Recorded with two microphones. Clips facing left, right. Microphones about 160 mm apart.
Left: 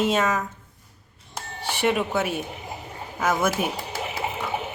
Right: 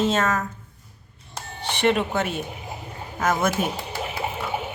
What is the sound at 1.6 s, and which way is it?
A woman's voice, 5° left (ahead or behind).